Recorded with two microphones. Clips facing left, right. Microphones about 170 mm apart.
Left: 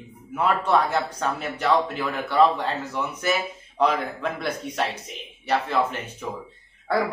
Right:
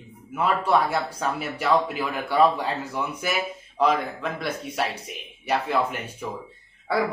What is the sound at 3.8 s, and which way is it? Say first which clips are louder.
Speech: even; centre (ahead or behind).